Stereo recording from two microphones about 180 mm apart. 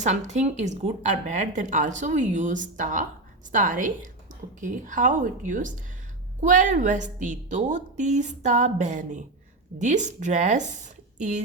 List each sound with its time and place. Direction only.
0.0 s speech: 40° right (ahead or behind)